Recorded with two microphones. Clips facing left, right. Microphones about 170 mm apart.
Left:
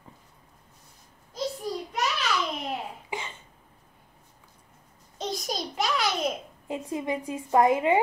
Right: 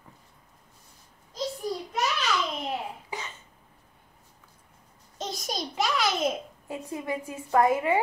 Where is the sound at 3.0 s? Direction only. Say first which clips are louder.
Left 2 dB; 15° left (ahead or behind).